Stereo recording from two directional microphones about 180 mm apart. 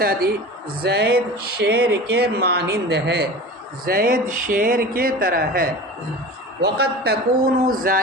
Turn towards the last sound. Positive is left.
turn(degrees=-50)  # may be behind; listen again after turning